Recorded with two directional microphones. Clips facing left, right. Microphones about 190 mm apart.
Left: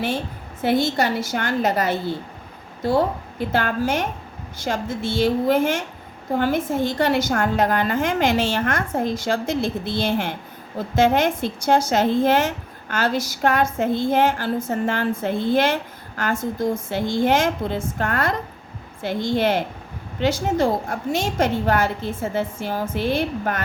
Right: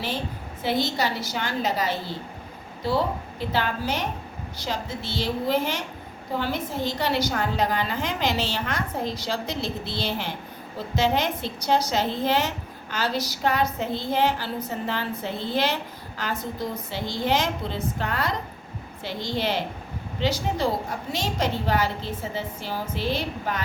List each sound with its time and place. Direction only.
0.6 s a woman's voice: 50° left (ahead or behind)